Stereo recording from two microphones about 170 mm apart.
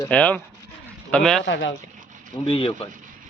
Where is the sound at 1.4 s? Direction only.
90° left.